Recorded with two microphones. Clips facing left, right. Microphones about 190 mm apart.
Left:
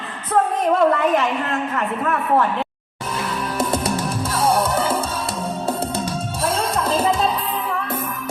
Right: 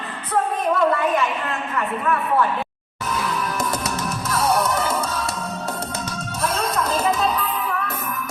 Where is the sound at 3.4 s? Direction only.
30° left (ahead or behind).